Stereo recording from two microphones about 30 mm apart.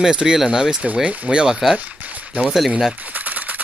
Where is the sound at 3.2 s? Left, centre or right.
Right.